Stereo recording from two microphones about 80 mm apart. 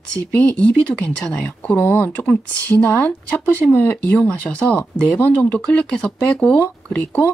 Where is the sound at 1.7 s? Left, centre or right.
Left.